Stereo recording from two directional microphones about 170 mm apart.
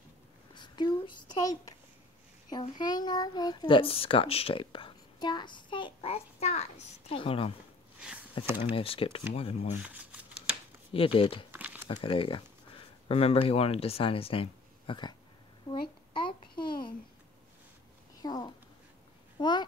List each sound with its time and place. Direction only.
0.6 s a sound: 25° left (ahead or behind)
2.8 s a child's voice: 25° left (ahead or behind)
8.5 s a child's voice: 30° left (ahead or behind)
9.8 s speech: 10° right (ahead or behind)
10.9 s a child's voice: 35° left (ahead or behind)
11.5 s crumpling: 10° right (ahead or behind)
11.9 s speech: 30° left (ahead or behind)
15.7 s a sound: 30° left (ahead or behind)
18.2 s a child's voice: 25° left (ahead or behind)